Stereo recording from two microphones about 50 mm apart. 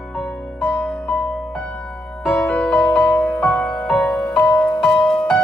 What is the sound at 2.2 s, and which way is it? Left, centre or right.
Music, left.